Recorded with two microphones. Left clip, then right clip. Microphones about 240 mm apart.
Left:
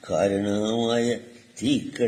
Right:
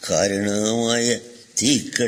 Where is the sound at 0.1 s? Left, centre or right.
Right.